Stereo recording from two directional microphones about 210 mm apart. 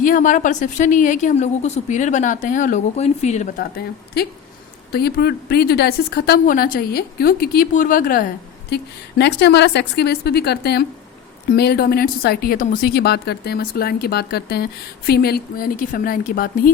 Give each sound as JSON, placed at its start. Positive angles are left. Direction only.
{"t": 0.0, "sound": "a woman's voice", "side_deg": 40}
{"t": 3.6, "sound": "speech", "side_deg": 50}
{"t": 8.7, "sound": "speech", "side_deg": 55}